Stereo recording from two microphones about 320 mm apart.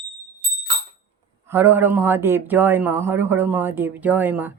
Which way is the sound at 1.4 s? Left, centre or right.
Centre.